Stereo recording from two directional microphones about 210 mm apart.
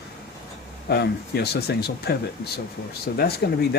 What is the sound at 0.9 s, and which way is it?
Speech, 50° left (ahead or behind).